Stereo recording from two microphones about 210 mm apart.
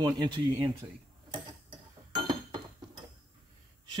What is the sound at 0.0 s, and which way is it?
Speech, 20° right (ahead or behind).